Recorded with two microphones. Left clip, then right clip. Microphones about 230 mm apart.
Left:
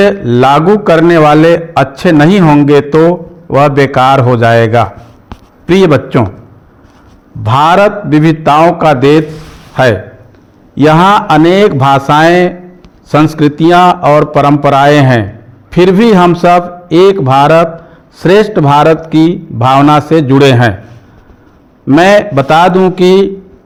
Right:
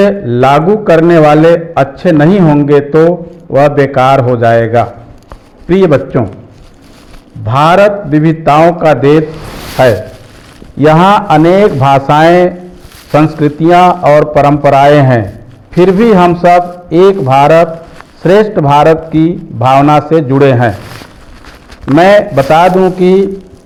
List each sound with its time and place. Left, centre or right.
0.0 s a man's voice: left
7.4 s a man's voice: left
21.9 s a man's voice: left